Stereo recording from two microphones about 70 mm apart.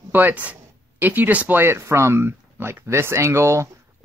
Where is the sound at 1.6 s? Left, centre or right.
Right.